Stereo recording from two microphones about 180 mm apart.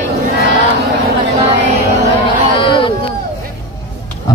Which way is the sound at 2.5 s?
30° left (ahead or behind).